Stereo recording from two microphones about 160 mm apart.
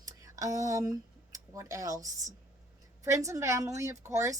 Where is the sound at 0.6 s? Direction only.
20° right (ahead or behind).